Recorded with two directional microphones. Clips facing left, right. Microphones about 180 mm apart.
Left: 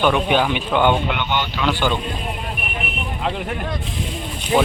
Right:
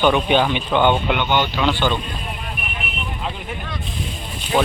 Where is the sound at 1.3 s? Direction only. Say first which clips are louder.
Right 5 dB; 30° right (ahead or behind).